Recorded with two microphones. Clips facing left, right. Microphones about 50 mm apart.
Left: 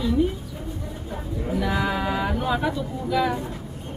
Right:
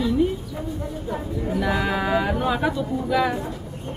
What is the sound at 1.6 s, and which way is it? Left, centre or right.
Speech, centre.